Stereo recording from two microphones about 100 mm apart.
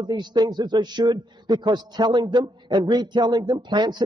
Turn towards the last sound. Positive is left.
turn(degrees=-45)  # may be behind; listen again after turning